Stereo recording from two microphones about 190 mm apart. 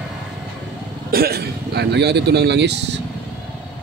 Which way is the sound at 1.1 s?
55° right (ahead or behind).